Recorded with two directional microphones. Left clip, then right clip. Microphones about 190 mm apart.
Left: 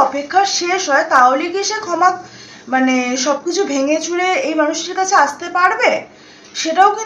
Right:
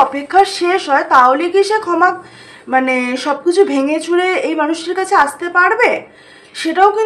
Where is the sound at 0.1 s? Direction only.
35° right (ahead or behind).